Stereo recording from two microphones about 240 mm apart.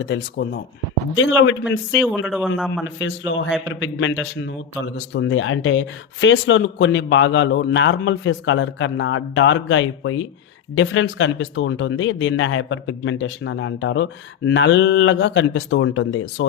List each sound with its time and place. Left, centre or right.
0.0 s speech: left
2.0 s speech: centre
2.8 s speech: left